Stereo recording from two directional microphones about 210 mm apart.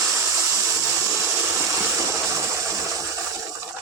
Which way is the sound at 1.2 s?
10° right (ahead or behind).